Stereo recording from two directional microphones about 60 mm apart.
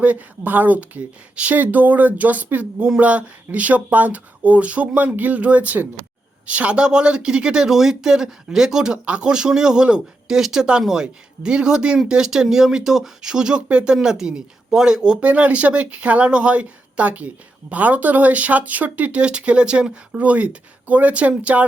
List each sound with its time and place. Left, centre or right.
0.0 s speech: right